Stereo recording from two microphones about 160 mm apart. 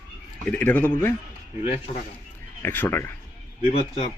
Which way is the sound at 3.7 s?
40° left (ahead or behind).